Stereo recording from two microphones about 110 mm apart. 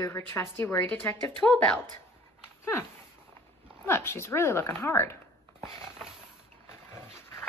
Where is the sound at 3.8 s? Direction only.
20° left (ahead or behind).